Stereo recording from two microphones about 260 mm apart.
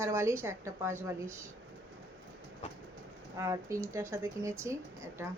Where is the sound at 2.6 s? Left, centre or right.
Left.